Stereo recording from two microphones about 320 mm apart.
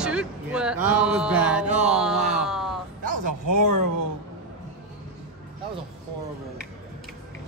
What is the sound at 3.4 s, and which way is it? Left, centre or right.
Speech, right.